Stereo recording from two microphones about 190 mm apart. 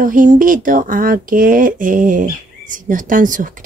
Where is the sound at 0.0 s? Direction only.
45° right (ahead or behind).